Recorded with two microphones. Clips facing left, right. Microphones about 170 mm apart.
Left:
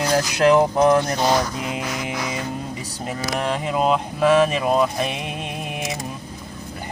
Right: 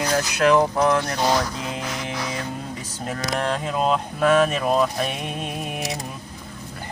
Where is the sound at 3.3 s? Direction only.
5° left (ahead or behind).